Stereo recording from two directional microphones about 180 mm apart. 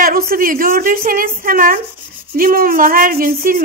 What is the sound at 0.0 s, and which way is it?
Speech, 50° right (ahead or behind).